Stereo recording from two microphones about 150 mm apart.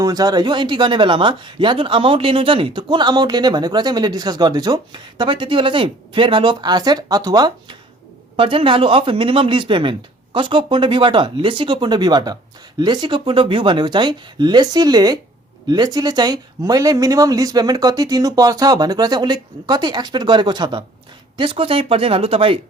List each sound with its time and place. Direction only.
0.0 s speech: 25° right (ahead or behind)